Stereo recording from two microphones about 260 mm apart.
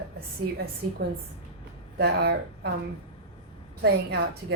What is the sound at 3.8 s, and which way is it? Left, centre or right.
Speech, right.